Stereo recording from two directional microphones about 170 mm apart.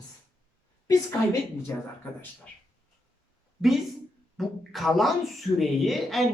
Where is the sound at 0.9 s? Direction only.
20° left (ahead or behind).